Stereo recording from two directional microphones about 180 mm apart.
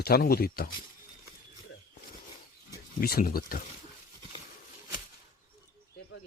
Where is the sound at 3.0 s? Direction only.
55° left (ahead or behind).